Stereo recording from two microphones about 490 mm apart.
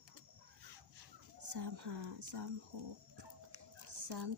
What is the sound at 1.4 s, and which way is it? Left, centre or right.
Chicken, right.